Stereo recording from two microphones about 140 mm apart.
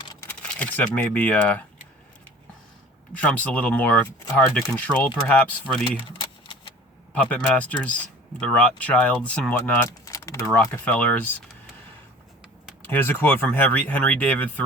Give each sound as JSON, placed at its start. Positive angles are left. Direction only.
{"t": 0.3, "sound": "speech", "side_deg": 10}
{"t": 3.2, "sound": "speech", "side_deg": 10}
{"t": 7.1, "sound": "speech", "side_deg": 5}
{"t": 10.1, "sound": "typing", "side_deg": 25}
{"t": 10.8, "sound": "speech", "side_deg": 10}
{"t": 12.9, "sound": "speech", "side_deg": 15}